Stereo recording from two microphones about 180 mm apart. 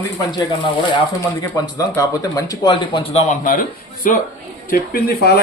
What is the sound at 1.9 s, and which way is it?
Speech, 20° left (ahead or behind).